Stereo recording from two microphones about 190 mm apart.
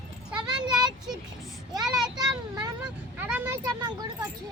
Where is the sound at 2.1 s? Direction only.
20° right (ahead or behind).